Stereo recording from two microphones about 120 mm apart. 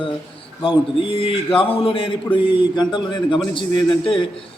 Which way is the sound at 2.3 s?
40° left (ahead or behind).